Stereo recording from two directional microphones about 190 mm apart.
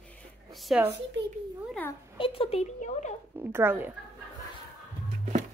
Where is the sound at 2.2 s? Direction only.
30° left (ahead or behind).